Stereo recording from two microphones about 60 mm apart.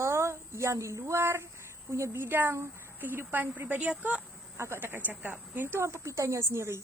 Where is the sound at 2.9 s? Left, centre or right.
Right.